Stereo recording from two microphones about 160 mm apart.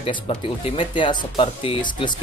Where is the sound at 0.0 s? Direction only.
35° left (ahead or behind).